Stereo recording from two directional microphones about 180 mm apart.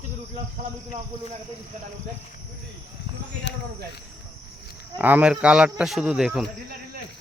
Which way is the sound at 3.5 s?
80° left.